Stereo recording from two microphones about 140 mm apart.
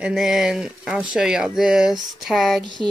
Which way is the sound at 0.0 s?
Centre (ahead or behind).